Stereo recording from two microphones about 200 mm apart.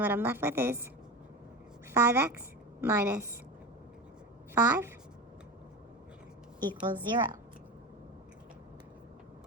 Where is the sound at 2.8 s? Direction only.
10° right (ahead or behind).